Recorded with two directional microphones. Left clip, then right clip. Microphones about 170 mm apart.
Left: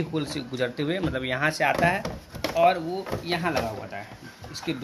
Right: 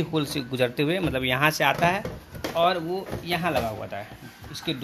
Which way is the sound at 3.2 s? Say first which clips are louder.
Right 1 dB; 40° right (ahead or behind).